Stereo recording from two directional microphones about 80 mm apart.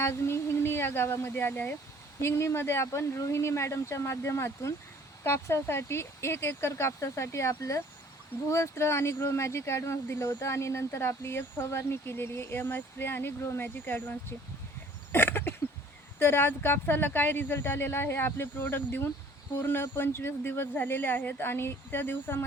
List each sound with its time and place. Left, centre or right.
0.0 s speech: left
15.1 s a sound: left
16.1 s speech: left